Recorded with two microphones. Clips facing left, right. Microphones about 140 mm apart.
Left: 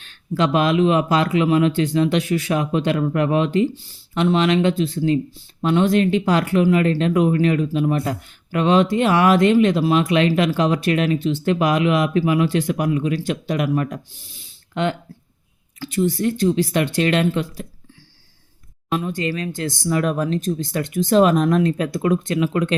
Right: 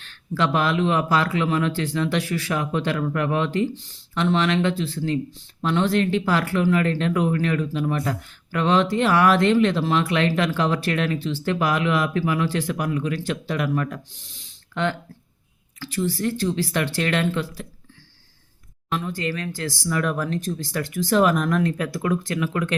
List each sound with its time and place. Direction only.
0.0 s speech: 20° left (ahead or behind)
18.9 s speech: 20° left (ahead or behind)